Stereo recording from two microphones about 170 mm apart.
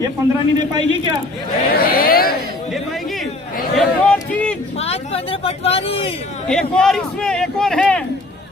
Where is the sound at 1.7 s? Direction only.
60° left (ahead or behind).